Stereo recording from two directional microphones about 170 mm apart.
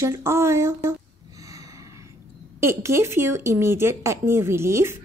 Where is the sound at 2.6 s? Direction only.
15° right (ahead or behind).